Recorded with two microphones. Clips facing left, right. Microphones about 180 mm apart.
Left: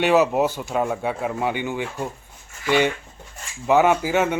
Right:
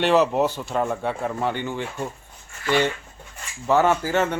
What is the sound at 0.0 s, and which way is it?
A man's voice, 5° left (ahead or behind).